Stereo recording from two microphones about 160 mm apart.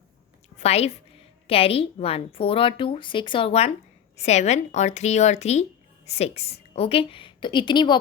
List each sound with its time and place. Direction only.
0.6 s a woman's voice: 40° left (ahead or behind)